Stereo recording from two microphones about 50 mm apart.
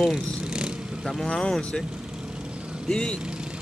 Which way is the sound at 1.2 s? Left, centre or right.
Centre.